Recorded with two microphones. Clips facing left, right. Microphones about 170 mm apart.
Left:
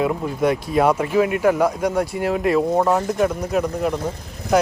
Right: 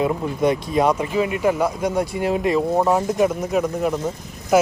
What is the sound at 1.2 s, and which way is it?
Speech, 10° right (ahead or behind).